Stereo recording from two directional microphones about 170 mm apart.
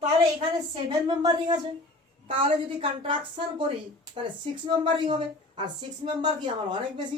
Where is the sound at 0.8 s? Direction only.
25° right (ahead or behind).